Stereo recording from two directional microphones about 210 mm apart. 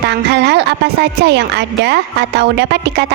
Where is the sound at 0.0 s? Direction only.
55° right (ahead or behind).